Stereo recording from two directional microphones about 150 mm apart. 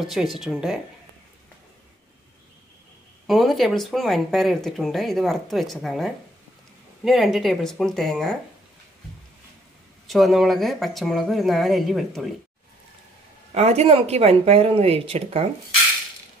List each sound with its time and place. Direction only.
0.0 s speech: centre (ahead or behind)
3.3 s speech: centre (ahead or behind)
10.0 s speech: centre (ahead or behind)
13.6 s speech: 45° right (ahead or behind)